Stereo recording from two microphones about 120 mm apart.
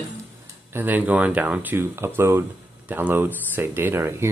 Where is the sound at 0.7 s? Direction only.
15° right (ahead or behind).